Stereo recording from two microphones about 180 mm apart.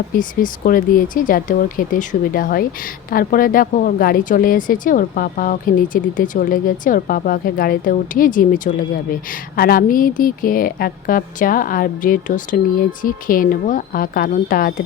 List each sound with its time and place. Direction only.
0.2 s speech: 50° left (ahead or behind)